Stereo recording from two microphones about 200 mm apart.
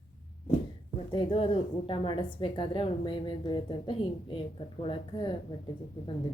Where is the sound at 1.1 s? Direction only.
25° left (ahead or behind).